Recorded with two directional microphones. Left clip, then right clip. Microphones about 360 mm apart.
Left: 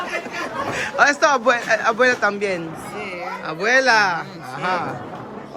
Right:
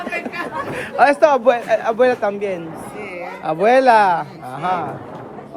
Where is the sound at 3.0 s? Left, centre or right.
Left.